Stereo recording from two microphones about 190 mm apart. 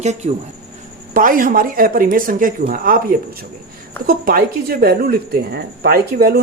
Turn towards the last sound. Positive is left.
turn(degrees=-55)  # may be behind; listen again after turning